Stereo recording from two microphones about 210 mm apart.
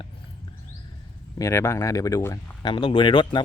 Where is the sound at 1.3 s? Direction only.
15° left (ahead or behind).